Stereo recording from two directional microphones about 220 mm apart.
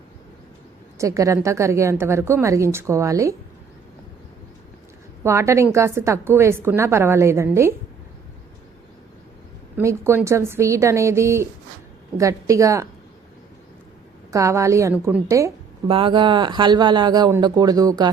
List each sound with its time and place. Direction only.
0.9 s a woman's voice: 15° right (ahead or behind)
5.2 s a woman's voice: 10° right (ahead or behind)
9.7 s a woman's voice: 10° right (ahead or behind)
14.3 s a woman's voice: 15° right (ahead or behind)